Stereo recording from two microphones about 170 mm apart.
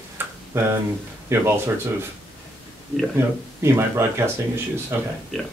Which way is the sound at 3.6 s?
15° right (ahead or behind).